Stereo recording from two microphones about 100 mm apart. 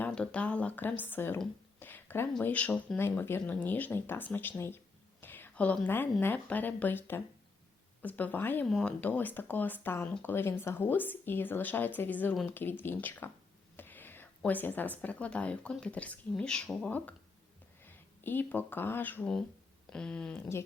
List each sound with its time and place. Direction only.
0.0 s speech: 10° left (ahead or behind)
1.8 s a sound: 20° left (ahead or behind)
2.4 s a woman's voice: 15° left (ahead or behind)
17.8 s speech: 20° left (ahead or behind)
19.9 s speech: 10° left (ahead or behind)